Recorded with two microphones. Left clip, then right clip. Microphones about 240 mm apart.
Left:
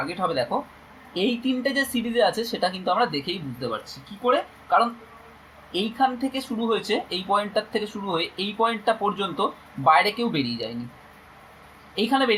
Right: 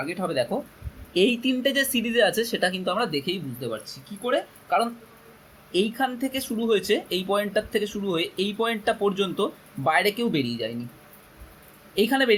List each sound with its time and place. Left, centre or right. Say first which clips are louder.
0.1 s speech: even; right
11.9 s speech: right 1 dB; right